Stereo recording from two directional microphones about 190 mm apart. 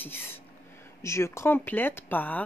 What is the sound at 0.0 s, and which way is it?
Speech, 10° left (ahead or behind).